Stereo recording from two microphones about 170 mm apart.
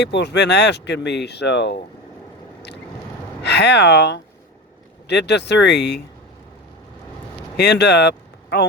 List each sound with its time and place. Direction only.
0.0 s speech: 90° left
3.4 s speech: 85° left
7.5 s speech: 75° left (ahead or behind)